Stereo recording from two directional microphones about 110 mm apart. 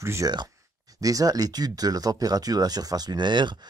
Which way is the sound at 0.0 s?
25° right (ahead or behind).